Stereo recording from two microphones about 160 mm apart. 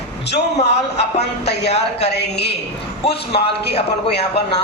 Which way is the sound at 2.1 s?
90° left.